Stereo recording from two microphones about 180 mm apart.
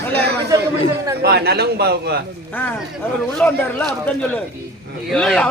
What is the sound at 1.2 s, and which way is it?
Speech, 60° right (ahead or behind).